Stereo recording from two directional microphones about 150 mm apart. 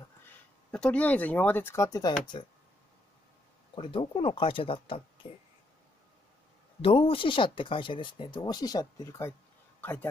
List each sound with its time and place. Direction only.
0.2 s speech: 10° left (ahead or behind); by 2.4 s 30° left (ahead or behind)
3.7 s speech: 35° left (ahead or behind)
6.8 s speech: 35° left (ahead or behind)
9.8 s a sound: 10° left (ahead or behind)